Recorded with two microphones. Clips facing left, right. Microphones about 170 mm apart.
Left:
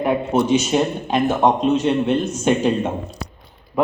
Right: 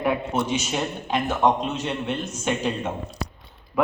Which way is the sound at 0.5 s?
35° left (ahead or behind).